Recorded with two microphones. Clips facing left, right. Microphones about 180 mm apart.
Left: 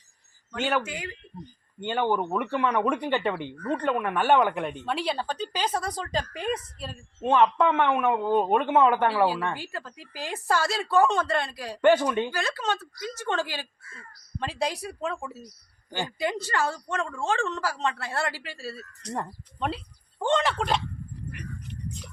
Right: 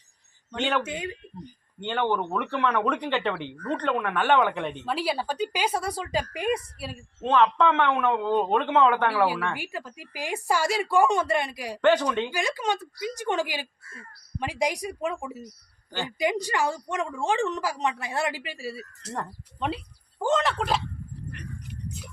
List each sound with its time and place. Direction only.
0.8 s speech: 25° right (ahead or behind)
1.8 s a man's voice: 10° left (ahead or behind)
4.9 s a woman's voice: 5° right (ahead or behind)
7.2 s a man's voice: 15° left (ahead or behind)
9.6 s a woman's voice: 15° right (ahead or behind)
11.8 s a man's voice: 10° left (ahead or behind)
12.3 s a woman's voice: 15° right (ahead or behind)
19.1 s a man's voice: 15° left (ahead or behind)
19.6 s speech: centre (ahead or behind)
21.7 s a sound: 5° right (ahead or behind)